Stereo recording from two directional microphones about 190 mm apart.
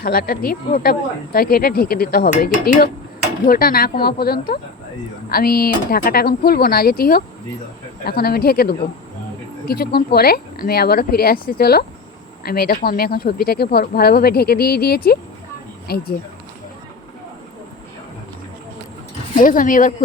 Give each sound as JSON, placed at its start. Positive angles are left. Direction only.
{"t": 0.0, "sound": "speech", "side_deg": 50}
{"t": 19.4, "sound": "speech", "side_deg": 45}